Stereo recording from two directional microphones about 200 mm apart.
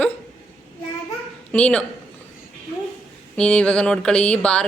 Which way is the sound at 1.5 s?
5° left (ahead or behind).